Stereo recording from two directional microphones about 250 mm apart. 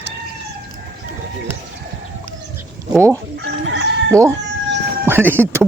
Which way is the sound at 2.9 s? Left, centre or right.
Centre.